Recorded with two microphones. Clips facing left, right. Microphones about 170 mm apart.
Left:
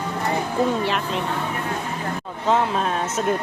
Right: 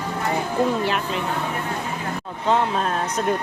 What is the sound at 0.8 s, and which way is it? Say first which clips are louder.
Speech: even; centre (ahead or behind).